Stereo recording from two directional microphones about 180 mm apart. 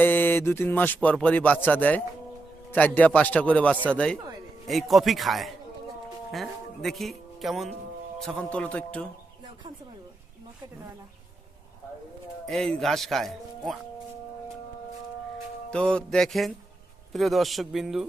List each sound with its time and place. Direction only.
0.0 s speech: 10° left (ahead or behind)
12.5 s speech: centre (ahead or behind)
15.7 s speech: 5° left (ahead or behind)